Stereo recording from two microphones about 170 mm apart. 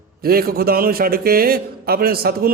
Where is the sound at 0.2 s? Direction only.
60° right (ahead or behind).